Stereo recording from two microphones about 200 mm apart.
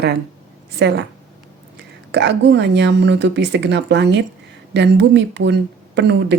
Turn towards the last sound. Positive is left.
turn(degrees=-60)  # may be behind; listen again after turning